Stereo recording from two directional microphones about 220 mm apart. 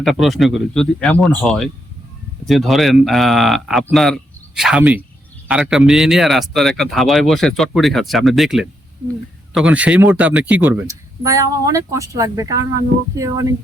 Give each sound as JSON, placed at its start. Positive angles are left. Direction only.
{"t": 0.0, "sound": "speech", "side_deg": 0}